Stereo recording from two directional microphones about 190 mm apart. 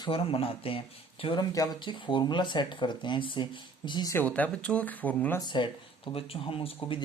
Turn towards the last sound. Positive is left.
turn(degrees=30)  # may be behind; listen again after turning